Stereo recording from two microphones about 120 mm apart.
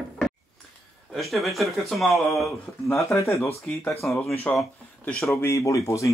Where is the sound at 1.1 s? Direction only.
Centre (ahead or behind).